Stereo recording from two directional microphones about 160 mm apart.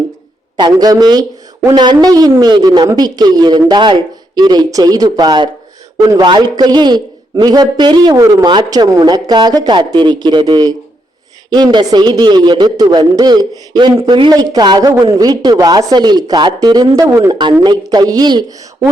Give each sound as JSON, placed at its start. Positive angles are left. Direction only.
{"t": 0.6, "sound": "a man's voice", "side_deg": -25}